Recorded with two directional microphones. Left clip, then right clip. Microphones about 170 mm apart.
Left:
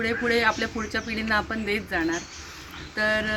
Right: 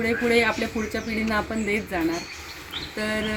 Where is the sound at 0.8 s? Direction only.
15° left (ahead or behind).